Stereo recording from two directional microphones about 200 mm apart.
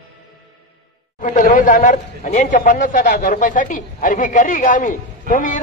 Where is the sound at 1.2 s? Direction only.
40° left (ahead or behind).